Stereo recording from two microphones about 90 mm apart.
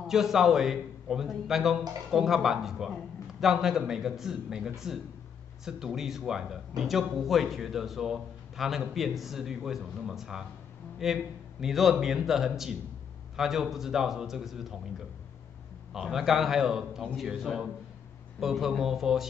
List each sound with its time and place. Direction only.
0.0 s a man's voice: 5° right (ahead or behind)
15.9 s a man's voice: 5° right (ahead or behind)